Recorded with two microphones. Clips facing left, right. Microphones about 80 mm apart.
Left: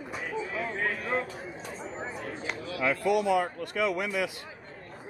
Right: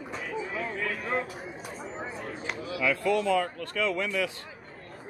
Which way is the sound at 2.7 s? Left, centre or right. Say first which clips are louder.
Right 1 dB; left.